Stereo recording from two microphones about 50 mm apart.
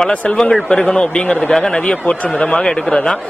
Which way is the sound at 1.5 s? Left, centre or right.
Centre.